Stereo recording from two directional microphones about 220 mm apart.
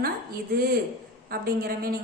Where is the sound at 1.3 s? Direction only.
45° right (ahead or behind).